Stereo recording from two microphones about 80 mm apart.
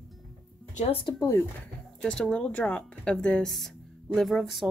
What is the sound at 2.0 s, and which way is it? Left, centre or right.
A woman's voice, centre.